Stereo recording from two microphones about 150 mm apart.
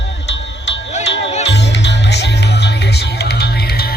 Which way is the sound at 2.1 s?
90° left.